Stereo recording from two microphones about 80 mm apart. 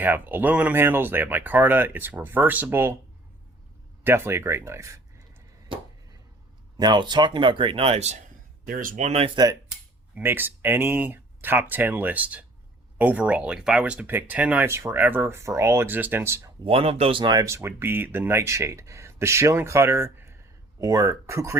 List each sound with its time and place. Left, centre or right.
0.0 s speech: right
4.0 s speech: right
6.7 s speech: right
9.4 s speech: right
10.2 s speech: right
14.7 s speech: right
17.1 s speech: right
17.4 s speech: right
20.7 s speech: right